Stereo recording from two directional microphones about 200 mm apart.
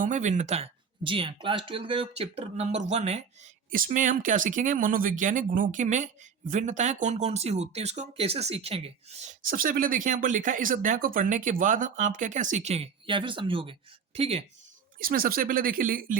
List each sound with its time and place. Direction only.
0.0 s speech: 40° right (ahead or behind)
14.9 s speech: 45° right (ahead or behind)